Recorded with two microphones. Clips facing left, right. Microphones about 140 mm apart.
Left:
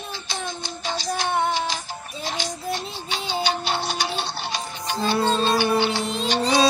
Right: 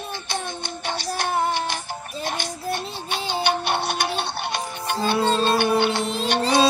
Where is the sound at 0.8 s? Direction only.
60° right (ahead or behind).